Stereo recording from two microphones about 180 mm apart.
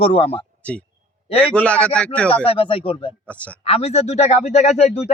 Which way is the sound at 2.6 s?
30° left (ahead or behind).